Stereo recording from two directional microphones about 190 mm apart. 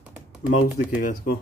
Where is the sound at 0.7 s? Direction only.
45° left (ahead or behind).